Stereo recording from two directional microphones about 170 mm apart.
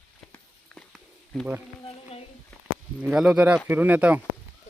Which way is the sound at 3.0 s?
5° right (ahead or behind).